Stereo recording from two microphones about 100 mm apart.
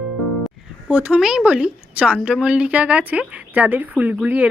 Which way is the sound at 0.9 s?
10° right (ahead or behind).